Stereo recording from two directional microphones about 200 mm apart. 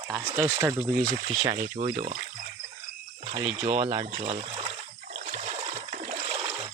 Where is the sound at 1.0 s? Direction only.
35° right (ahead or behind).